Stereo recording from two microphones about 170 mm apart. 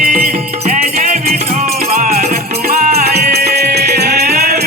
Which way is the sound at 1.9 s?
60° right (ahead or behind).